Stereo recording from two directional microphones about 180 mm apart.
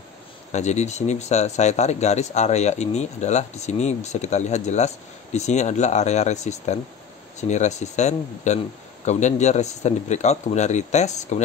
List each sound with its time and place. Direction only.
0.5 s speech: 40° left (ahead or behind)